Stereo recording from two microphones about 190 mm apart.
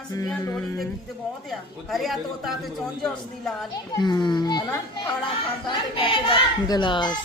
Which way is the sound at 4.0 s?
20° left (ahead or behind).